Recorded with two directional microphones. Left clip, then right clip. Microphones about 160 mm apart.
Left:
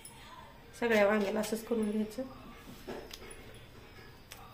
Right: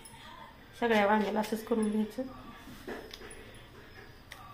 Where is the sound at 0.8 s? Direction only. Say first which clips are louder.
Right 1 dB; 10° left (ahead or behind).